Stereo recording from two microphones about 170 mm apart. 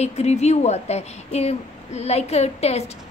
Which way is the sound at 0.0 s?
40° left (ahead or behind).